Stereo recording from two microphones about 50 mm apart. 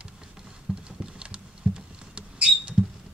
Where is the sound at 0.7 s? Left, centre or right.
Centre.